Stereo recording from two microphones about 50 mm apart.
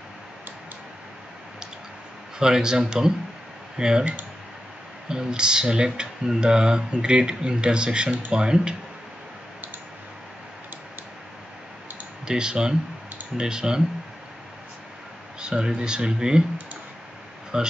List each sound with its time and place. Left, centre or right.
2.3 s speech: centre
5.1 s speech: centre
12.3 s speech: centre
15.4 s speech: centre
17.5 s speech: centre